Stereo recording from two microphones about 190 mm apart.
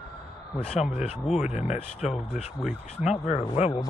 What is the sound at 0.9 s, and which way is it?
Speech, 35° left (ahead or behind).